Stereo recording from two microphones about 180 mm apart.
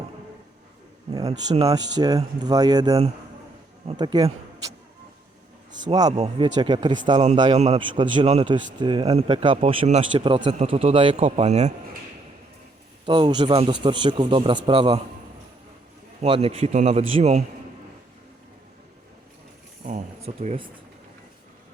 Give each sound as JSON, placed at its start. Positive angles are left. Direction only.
{"t": 1.2, "sound": "speech", "side_deg": -35}
{"t": 1.7, "sound": "speech", "side_deg": -20}
{"t": 5.9, "sound": "speech", "side_deg": -20}
{"t": 7.5, "sound": "speech", "side_deg": -40}
{"t": 13.1, "sound": "speech", "side_deg": -30}
{"t": 16.2, "sound": "speech", "side_deg": -35}
{"t": 19.8, "sound": "speech", "side_deg": -40}